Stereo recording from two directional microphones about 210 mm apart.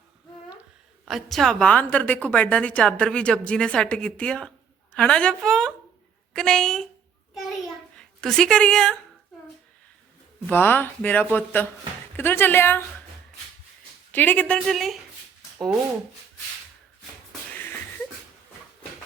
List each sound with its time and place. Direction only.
1.0 s a woman's voice: centre (ahead or behind)
7.9 s a woman's voice: 5° left (ahead or behind)
10.4 s speech: 10° left (ahead or behind)
14.1 s a woman's voice: 10° left (ahead or behind)